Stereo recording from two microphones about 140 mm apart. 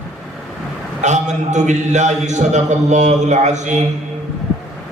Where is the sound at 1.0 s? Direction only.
55° right (ahead or behind).